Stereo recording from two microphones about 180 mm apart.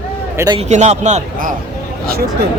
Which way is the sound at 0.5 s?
40° right (ahead or behind).